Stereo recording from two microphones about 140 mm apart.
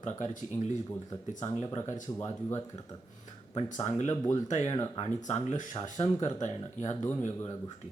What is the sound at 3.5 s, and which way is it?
Speech, 55° left (ahead or behind).